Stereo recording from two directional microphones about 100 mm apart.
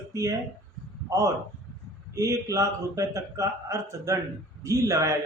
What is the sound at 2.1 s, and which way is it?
Speech, 30° right (ahead or behind).